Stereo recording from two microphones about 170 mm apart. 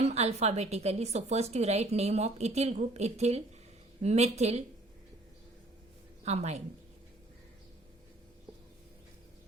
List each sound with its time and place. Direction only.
0.0 s a woman's voice: 40° right (ahead or behind)
6.2 s a woman's voice: 40° right (ahead or behind)